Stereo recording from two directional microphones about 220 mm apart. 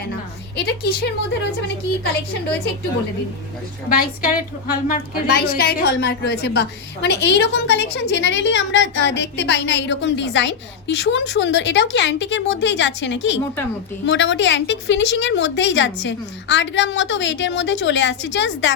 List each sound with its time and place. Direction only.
0.5 s a woman's voice: 45° left (ahead or behind)
3.8 s a woman's voice: 40° left (ahead or behind)